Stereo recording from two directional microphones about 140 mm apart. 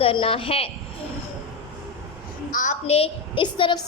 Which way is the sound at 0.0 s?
40° left (ahead or behind).